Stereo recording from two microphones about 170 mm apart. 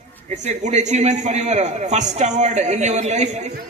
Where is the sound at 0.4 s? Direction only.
45° right (ahead or behind).